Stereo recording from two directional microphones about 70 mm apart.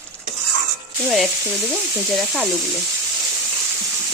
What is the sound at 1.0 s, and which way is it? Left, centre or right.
Speech, centre.